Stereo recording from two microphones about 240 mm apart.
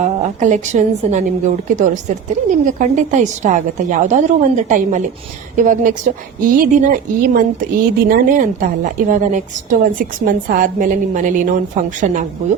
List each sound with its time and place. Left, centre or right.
0.0 s a woman's voice: right